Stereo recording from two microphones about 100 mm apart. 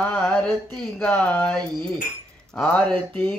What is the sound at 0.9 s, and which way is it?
Speech, 10° left (ahead or behind).